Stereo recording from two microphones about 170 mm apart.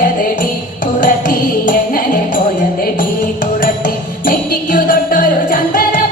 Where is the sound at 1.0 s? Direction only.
50° left (ahead or behind).